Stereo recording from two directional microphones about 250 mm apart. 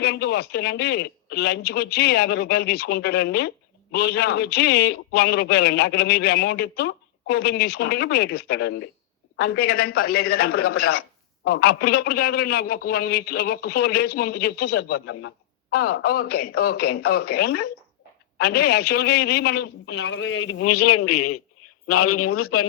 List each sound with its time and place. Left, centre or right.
0.0 s a man's voice: left